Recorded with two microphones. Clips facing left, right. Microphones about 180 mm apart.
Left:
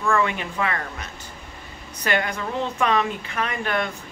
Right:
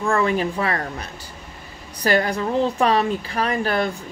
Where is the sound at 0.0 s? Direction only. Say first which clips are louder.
Right 3 dB; 35° right (ahead or behind).